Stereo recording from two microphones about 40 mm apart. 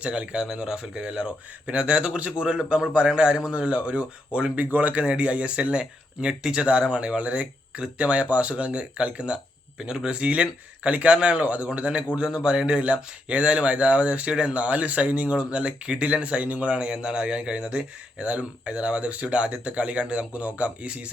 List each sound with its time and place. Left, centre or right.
0.0 s speech: right
0.4 s speech: centre
4.6 s speech: right